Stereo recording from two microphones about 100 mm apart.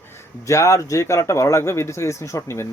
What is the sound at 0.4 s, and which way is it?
Speech, 30° left (ahead or behind).